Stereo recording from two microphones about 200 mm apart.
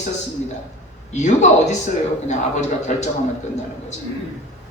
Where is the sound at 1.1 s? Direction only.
35° left (ahead or behind).